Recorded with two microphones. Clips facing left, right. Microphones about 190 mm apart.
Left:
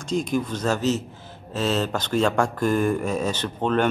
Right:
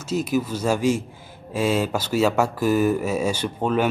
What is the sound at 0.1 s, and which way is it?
Speech, 5° right (ahead or behind).